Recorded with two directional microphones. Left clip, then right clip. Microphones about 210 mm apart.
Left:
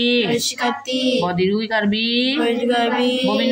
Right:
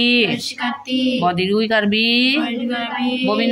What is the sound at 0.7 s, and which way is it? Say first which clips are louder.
Child singing: right 2 dB; 45° left (ahead or behind).